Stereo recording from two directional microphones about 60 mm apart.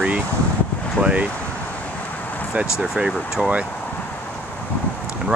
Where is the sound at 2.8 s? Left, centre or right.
Centre.